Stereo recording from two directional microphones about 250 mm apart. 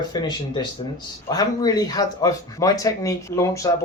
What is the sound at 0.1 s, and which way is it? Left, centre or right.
Speech, centre.